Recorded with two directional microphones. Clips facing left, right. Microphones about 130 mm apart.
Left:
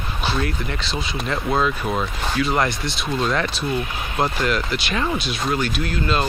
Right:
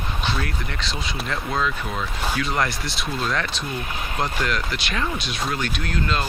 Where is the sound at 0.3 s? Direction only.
5° left (ahead or behind).